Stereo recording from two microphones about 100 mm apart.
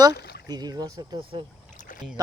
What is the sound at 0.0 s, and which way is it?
Speech, 40° right (ahead or behind).